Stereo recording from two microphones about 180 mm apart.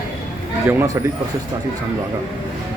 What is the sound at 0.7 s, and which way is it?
Speech, 15° right (ahead or behind).